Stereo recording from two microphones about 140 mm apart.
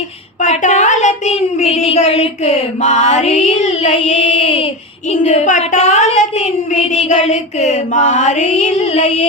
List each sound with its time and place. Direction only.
0.4 s child singing: 55° left (ahead or behind)
5.1 s a woman's voice: 55° left (ahead or behind)
6.9 s music: 50° left (ahead or behind)